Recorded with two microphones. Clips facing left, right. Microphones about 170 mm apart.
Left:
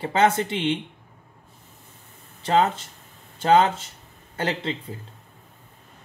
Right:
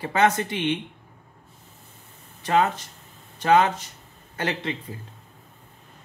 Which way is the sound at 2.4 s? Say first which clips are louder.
Left 1 dB; 25° left (ahead or behind).